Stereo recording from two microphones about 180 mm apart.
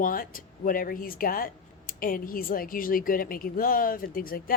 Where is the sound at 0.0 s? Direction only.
50° left (ahead or behind).